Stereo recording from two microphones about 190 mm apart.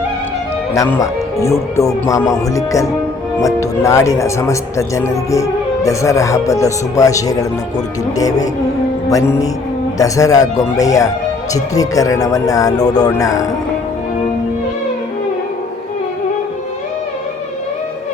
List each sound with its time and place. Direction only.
0.7 s speech: 15° left (ahead or behind)